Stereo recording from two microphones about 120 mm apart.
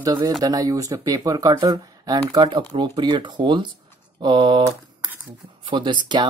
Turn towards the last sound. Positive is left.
turn(degrees=-40)  # may be behind; listen again after turning